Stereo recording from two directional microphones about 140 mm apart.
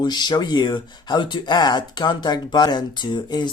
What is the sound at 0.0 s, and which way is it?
Speech, 30° left (ahead or behind).